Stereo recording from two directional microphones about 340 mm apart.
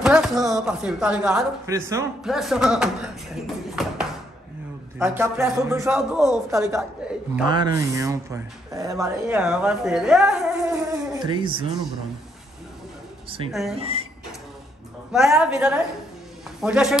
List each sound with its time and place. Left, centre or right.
0.0 s a man's voice: centre
11.1 s a man's voice: centre
13.5 s speech: centre
13.7 s a man's voice: centre
15.1 s speech: centre